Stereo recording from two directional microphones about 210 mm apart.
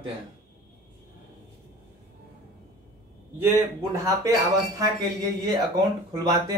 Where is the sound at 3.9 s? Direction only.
15° right (ahead or behind).